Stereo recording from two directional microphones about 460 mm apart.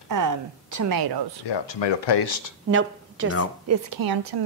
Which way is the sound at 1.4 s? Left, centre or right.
Left.